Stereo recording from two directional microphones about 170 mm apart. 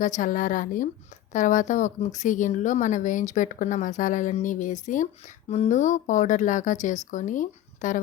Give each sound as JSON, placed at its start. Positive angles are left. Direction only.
{"t": 0.0, "sound": "a woman's voice", "side_deg": 50}